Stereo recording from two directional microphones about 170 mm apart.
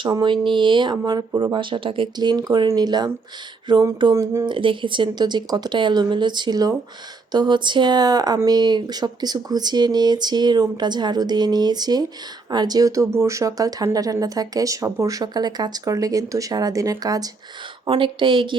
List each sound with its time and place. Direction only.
0.0 s speech: 25° right (ahead or behind)